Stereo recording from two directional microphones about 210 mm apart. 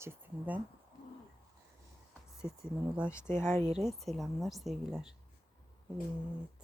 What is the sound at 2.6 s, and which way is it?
Speech, 5° right (ahead or behind).